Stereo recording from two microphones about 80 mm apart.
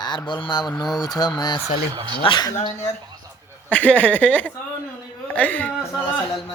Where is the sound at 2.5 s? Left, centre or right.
Left.